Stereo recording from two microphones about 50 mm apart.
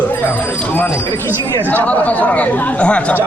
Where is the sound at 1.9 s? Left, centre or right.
Left.